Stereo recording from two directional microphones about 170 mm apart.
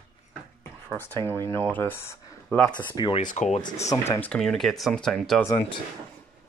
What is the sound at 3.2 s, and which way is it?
Speech, 45° left (ahead or behind).